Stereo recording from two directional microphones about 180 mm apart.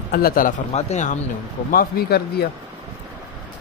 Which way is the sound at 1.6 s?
55° left (ahead or behind).